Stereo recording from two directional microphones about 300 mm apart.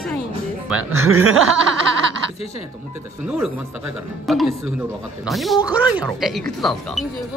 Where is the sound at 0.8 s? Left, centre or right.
Right.